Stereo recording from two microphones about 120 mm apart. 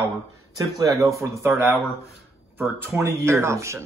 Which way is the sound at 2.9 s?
20° right (ahead or behind).